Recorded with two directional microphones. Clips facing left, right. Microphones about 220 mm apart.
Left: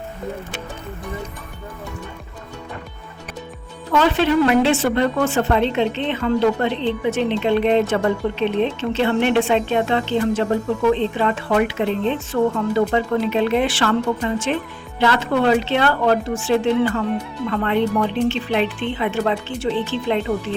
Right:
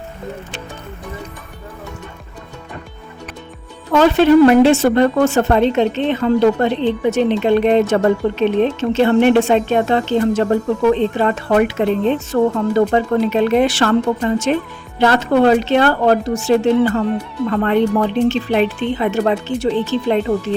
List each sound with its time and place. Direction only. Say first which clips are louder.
3.9 s speech: right 6 dB; 40° right (ahead or behind)